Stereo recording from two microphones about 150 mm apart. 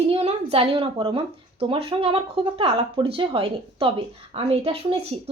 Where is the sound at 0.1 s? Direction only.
40° right (ahead or behind).